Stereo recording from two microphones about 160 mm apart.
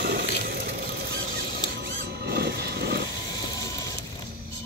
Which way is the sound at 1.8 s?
90° right.